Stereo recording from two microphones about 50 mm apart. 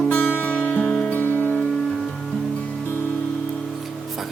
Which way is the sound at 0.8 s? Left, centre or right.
Centre.